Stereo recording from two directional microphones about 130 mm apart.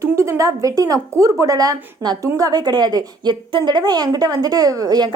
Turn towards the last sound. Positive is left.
turn(degrees=-30)  # may be behind; listen again after turning